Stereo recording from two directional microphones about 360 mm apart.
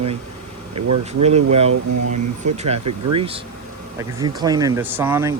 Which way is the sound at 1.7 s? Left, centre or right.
Right.